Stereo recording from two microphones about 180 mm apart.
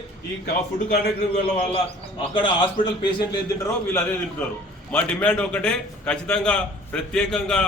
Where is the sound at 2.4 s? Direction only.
25° left (ahead or behind).